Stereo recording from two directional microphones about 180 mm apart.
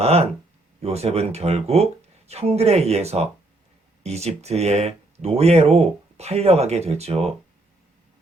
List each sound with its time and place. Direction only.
0.0 s speech: 35° right (ahead or behind)